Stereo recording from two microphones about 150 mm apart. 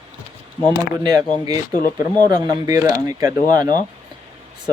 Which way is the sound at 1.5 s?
25° right (ahead or behind).